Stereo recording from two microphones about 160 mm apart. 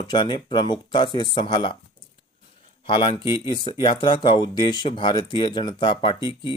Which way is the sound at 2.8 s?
30° left (ahead or behind).